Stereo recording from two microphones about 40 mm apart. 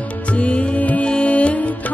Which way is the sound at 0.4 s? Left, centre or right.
Left.